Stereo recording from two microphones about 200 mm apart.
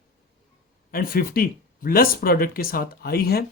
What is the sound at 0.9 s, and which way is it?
Speech, 45° left (ahead or behind).